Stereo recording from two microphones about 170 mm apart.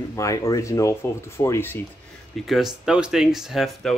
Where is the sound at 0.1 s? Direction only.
20° left (ahead or behind).